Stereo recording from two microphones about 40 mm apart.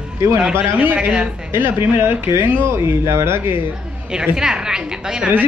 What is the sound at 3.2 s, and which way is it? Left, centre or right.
Speech, right.